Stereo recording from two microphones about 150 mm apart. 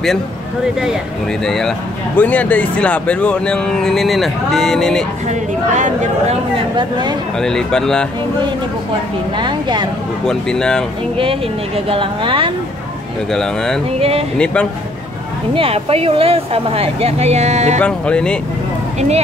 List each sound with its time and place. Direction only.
1.4 s speech: 5° left (ahead or behind)
5.3 s a woman's voice: 55° right (ahead or behind)
6.8 s a woman's voice: 30° right (ahead or behind)
7.3 s speech: 5° left (ahead or behind)
9.4 s a woman's voice: 30° right (ahead or behind)
10.2 s speech: 5° left (ahead or behind)
11.9 s speech: 35° right (ahead or behind)
13.3 s speech: 5° left (ahead or behind)
13.9 s a woman's voice: 40° right (ahead or behind)
14.4 s speech: 5° left (ahead or behind)
15.5 s speech: 40° right (ahead or behind)
17.7 s speech: 5° left (ahead or behind)
18.9 s a woman's voice: 45° right (ahead or behind)